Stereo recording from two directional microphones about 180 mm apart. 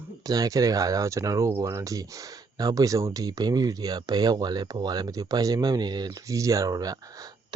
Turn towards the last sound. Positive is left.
turn(degrees=-20)  # may be behind; listen again after turning